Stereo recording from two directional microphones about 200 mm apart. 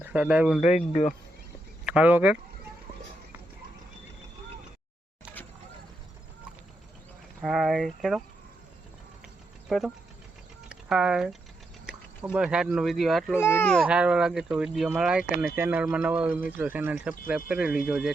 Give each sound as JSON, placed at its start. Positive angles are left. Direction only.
{"t": 0.0, "sound": "speech", "side_deg": -5}
{"t": 0.6, "sound": "speech", "side_deg": 35}
{"t": 1.8, "sound": "speech", "side_deg": -5}
{"t": 7.4, "sound": "speech", "side_deg": 0}
{"t": 9.6, "sound": "speech", "side_deg": 0}
{"t": 13.4, "sound": "speech", "side_deg": 10}
{"t": 13.8, "sound": "speech", "side_deg": -5}